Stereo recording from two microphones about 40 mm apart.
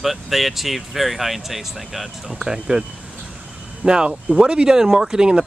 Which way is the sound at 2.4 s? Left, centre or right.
Centre.